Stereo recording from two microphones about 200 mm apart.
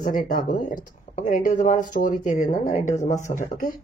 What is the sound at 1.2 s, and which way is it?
Speech, 40° left (ahead or behind).